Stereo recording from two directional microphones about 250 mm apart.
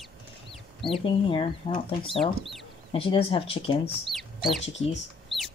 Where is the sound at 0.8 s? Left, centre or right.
Left.